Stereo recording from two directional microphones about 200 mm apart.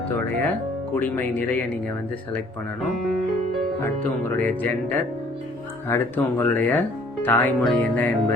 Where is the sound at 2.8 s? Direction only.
Centre (ahead or behind).